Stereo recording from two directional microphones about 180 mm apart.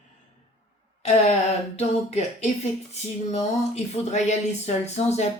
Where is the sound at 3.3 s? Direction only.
35° left (ahead or behind).